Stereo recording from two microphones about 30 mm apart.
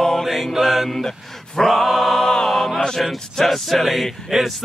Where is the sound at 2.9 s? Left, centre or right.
Centre.